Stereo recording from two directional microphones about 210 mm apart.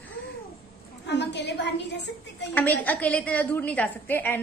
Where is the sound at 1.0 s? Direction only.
55° left (ahead or behind).